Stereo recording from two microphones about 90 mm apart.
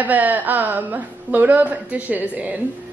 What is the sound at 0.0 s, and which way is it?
A woman's voice, 20° right (ahead or behind).